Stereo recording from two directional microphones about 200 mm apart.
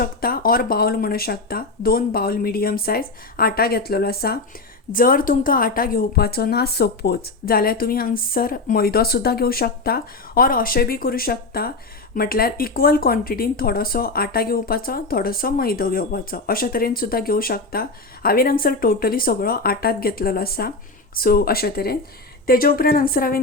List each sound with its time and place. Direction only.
0.0 s speech: 45° left (ahead or behind)